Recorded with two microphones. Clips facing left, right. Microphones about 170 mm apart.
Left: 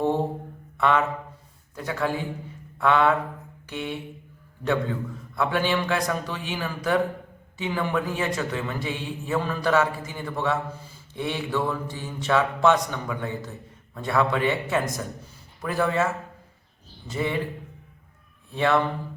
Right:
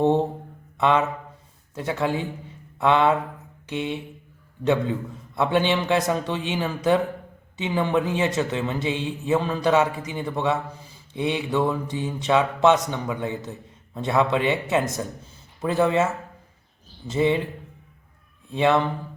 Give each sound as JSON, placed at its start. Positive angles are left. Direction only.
{"t": 0.8, "sound": "a man's voice", "side_deg": -20}
{"t": 2.7, "sound": "a sound", "side_deg": -20}
{"t": 3.7, "sound": "a man's voice", "side_deg": -20}
{"t": 17.1, "sound": "a man's voice", "side_deg": -20}
{"t": 18.5, "sound": "a man's voice", "side_deg": -20}